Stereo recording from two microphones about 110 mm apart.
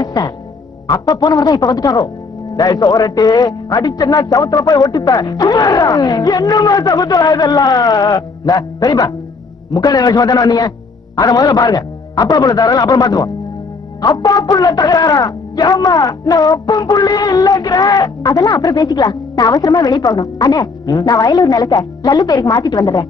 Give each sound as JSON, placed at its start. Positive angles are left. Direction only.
{"t": 0.0, "sound": "music", "side_deg": 40}
{"t": 0.8, "sound": "speech", "side_deg": 30}